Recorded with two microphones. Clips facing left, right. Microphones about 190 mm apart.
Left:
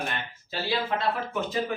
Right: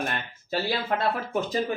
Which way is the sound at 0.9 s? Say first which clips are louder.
Right 2 dB; 55° right (ahead or behind).